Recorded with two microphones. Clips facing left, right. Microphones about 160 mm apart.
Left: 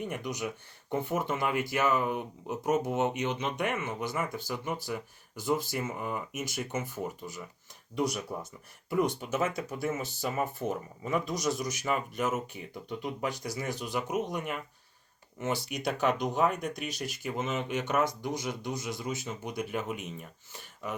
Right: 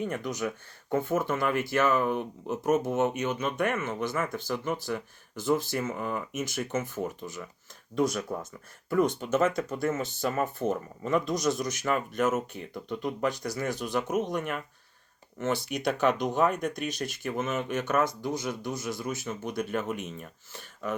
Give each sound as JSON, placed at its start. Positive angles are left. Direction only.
{"t": 0.0, "sound": "speech", "side_deg": 15}
{"t": 8.9, "sound": "speech", "side_deg": 15}